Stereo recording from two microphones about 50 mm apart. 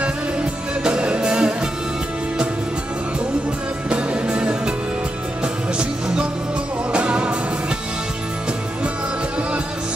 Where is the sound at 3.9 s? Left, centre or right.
Right.